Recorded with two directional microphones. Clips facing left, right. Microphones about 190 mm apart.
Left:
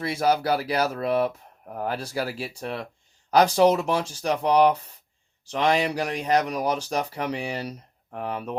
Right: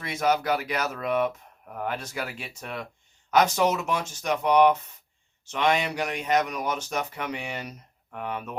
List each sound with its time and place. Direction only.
0.0 s speech: 30° left (ahead or behind)